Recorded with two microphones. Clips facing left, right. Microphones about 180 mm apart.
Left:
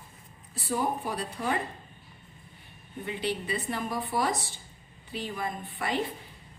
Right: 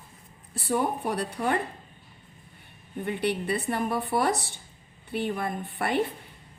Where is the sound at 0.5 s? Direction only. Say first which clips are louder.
Right 3 dB; 65° right (ahead or behind).